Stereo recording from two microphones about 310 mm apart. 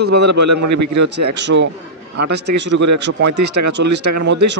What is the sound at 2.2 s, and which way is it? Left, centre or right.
Speech, right.